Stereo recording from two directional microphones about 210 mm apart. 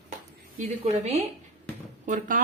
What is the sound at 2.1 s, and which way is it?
Speech, 40° right (ahead or behind).